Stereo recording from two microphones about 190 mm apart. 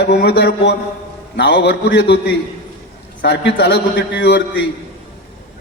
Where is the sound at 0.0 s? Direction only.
65° left (ahead or behind).